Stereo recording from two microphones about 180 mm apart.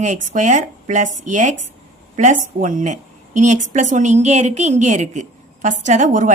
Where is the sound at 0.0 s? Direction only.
45° right (ahead or behind).